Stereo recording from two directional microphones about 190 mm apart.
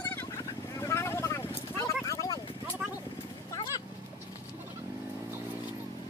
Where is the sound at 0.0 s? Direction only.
10° left (ahead or behind).